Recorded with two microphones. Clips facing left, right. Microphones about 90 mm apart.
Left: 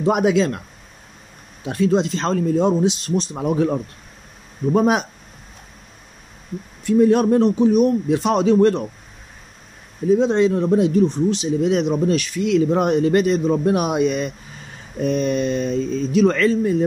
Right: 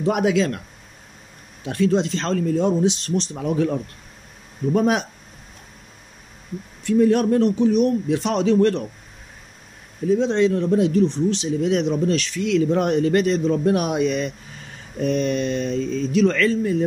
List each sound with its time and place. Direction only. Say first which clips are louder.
0.0 s a man's voice: left 2 dB; 20° left (ahead or behind)
1.6 s a man's voice: left 1 dB; 20° left (ahead or behind)
6.8 s a man's voice: left 2 dB; 20° left (ahead or behind)
10.0 s a man's voice: left 2 dB; 15° left (ahead or behind)